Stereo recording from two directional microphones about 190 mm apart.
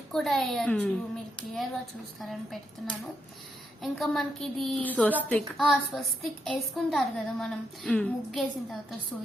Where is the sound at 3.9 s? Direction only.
Centre (ahead or behind).